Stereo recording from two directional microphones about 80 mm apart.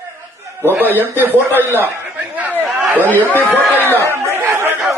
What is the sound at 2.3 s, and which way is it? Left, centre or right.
Chatter, right.